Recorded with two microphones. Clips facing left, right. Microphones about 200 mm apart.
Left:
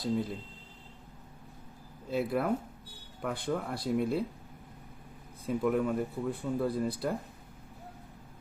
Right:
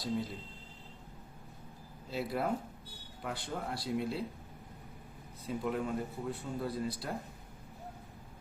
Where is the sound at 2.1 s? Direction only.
55° left (ahead or behind).